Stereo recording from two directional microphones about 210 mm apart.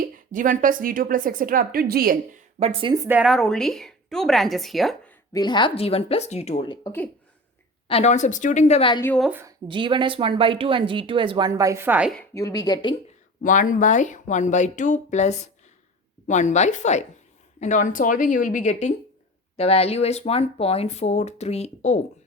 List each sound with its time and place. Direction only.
0.0 s a woman's voice: 40° right (ahead or behind)
2.6 s speech: 30° right (ahead or behind)
2.9 s a woman's voice: 5° right (ahead or behind)
5.3 s a woman's voice: 20° left (ahead or behind)
9.0 s a woman's voice: 10° left (ahead or behind)
9.2 s a woman's voice: 10° right (ahead or behind)
9.6 s speech: 25° right (ahead or behind); by 12.1 s 5° right (ahead or behind)
12.3 s a woman's voice: 15° left (ahead or behind)
13.4 s speech: 40° left (ahead or behind)